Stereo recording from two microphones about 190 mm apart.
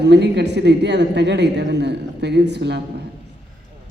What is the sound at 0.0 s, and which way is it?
A woman's voice, 65° right (ahead or behind).